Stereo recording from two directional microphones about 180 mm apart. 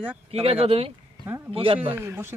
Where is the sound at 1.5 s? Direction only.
30° right (ahead or behind).